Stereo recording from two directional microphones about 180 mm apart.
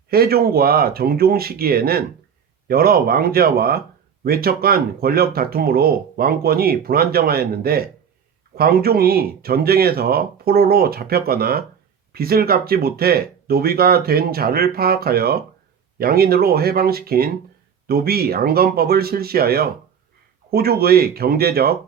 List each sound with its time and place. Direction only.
0.1 s speech: 60° right (ahead or behind)